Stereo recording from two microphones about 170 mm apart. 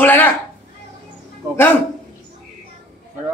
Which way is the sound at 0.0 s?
10° left (ahead or behind).